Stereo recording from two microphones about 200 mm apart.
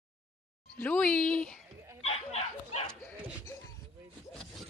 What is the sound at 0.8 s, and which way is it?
Speech, 5° left (ahead or behind).